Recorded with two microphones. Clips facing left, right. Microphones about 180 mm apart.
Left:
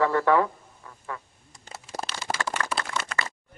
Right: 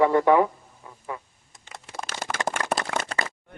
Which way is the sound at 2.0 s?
50° right (ahead or behind).